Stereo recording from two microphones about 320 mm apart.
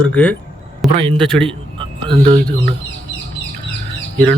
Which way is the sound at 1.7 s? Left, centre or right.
Centre.